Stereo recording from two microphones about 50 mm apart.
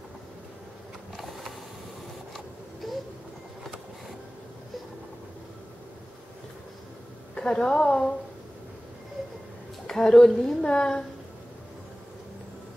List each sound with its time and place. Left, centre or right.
1.1 s a sound: centre
2.3 s printer: centre
7.3 s a woman's voice: centre
9.8 s a woman's voice: centre